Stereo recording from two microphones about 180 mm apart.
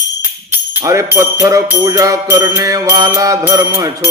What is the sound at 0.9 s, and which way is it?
Music, 15° right (ahead or behind).